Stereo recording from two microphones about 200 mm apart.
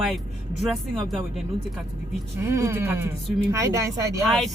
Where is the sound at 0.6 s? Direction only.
Centre (ahead or behind).